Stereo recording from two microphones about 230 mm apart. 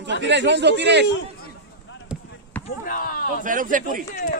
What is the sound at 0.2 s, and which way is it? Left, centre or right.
Speech, right.